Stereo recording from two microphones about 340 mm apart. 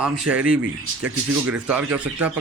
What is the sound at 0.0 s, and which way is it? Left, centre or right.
Speech, centre.